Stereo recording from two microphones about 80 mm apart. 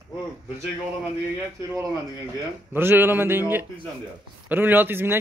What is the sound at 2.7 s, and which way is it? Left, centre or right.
Speech, right.